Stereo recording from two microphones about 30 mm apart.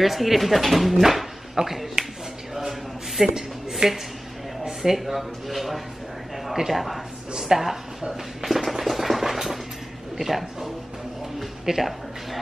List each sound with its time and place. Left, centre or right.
0.0 s speech: centre
1.0 s a sound: centre
2.0 s speech: right
3.2 s speech: centre
3.8 s speech: right
4.9 s speech: centre
7.3 s speech: centre
8.1 s speech: centre
8.8 s a sound: centre
10.1 s speech: centre